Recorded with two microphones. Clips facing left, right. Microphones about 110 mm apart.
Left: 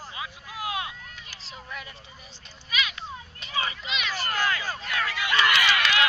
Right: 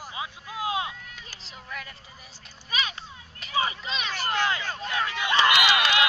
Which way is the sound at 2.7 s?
35° right (ahead or behind).